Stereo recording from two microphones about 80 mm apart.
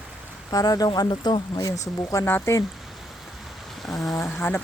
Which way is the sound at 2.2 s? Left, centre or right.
Left.